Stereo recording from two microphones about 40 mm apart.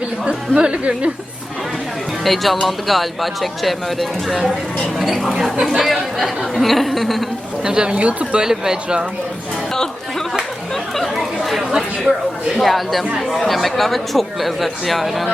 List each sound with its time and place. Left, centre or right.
0.3 s speech: right
2.2 s speech: centre
7.6 s speech: right
8.4 s speech: centre
9.7 s chatter: centre
11.1 s chatter: centre
12.5 s speech: centre
13.1 s speech: centre
13.4 s speech: centre